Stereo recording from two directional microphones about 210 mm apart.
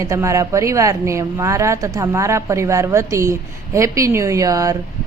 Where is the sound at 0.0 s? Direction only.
15° right (ahead or behind).